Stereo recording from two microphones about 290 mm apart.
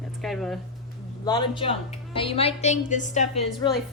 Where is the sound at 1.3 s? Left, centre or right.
Centre.